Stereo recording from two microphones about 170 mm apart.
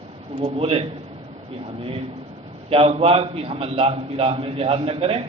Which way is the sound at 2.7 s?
35° right (ahead or behind).